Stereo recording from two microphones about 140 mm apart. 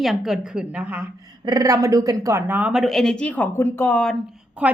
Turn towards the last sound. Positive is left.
turn(degrees=-10)  # may be behind; listen again after turning